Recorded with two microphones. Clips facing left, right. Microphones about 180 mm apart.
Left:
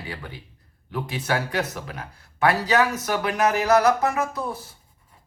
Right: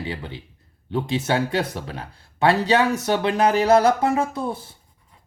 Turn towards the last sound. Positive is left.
turn(degrees=-30)  # may be behind; listen again after turning